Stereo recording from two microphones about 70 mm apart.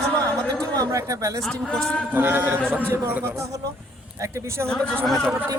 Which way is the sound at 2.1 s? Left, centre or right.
Right.